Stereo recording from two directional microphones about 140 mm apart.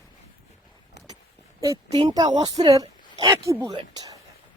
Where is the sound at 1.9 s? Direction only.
40° right (ahead or behind).